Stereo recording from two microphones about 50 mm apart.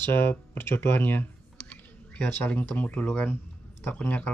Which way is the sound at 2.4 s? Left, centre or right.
Left.